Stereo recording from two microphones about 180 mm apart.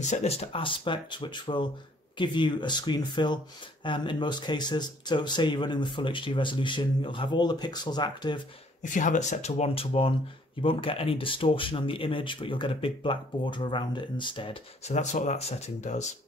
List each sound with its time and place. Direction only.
0.0 s speech: 40° left (ahead or behind)
8.9 s speech: 45° left (ahead or behind)
15.0 s speech: 40° left (ahead or behind)